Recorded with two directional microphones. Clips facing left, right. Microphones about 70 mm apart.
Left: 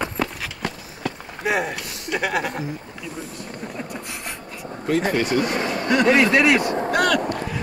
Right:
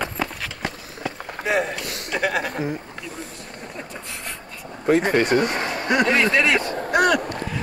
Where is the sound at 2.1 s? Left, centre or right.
Centre.